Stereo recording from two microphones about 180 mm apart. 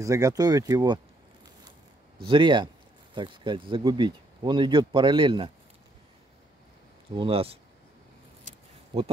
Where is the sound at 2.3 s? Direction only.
25° right (ahead or behind).